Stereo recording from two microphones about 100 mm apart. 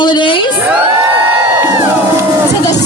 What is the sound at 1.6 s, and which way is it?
Music, 25° right (ahead or behind).